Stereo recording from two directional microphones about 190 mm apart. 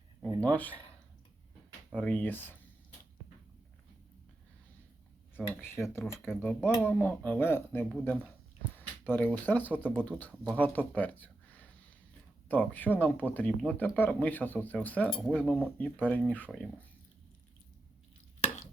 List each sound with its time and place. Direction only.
0.3 s speech: 10° left (ahead or behind)
1.9 s speech: 5° left (ahead or behind)
5.5 s speech: 10° left (ahead or behind)
18.3 s stir: 35° left (ahead or behind)